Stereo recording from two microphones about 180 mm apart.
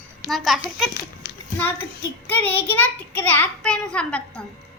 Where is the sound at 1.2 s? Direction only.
65° left (ahead or behind).